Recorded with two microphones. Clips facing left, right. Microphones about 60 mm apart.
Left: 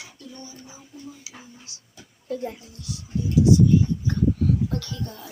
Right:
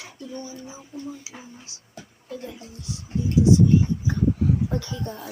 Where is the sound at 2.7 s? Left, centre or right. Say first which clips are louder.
Even; right.